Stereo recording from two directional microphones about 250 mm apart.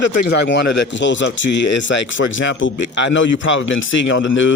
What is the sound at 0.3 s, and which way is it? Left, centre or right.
Speech, left.